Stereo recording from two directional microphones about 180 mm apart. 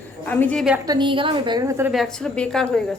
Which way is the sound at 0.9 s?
25° right (ahead or behind).